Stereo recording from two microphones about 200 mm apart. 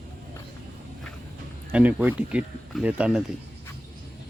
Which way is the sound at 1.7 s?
10° right (ahead or behind).